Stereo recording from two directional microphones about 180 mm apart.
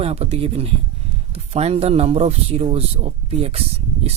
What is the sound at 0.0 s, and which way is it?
Speech, 35° right (ahead or behind).